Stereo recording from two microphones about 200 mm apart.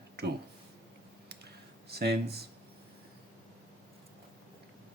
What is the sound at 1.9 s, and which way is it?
Speech, 55° right (ahead or behind).